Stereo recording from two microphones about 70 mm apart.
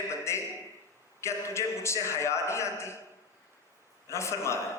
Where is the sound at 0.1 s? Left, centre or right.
Left.